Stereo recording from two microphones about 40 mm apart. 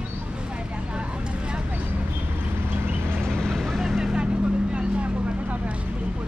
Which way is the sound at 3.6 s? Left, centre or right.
Centre.